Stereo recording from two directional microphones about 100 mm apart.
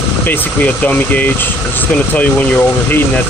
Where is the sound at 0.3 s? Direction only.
15° left (ahead or behind).